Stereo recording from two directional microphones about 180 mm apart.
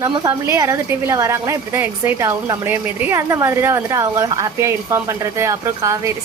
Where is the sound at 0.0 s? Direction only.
20° right (ahead or behind).